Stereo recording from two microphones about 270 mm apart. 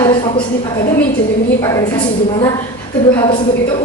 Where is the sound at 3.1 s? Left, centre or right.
Centre.